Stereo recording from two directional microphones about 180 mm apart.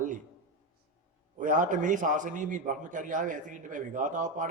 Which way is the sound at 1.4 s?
45° right (ahead or behind).